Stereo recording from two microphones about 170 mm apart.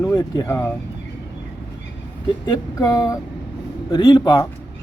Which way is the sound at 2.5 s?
20° left (ahead or behind).